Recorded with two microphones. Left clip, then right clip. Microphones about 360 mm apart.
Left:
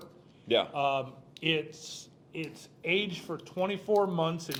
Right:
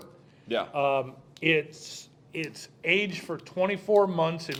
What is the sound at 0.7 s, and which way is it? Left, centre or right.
Speech, right.